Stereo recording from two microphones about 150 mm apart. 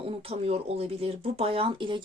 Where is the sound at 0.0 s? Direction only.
40° right (ahead or behind).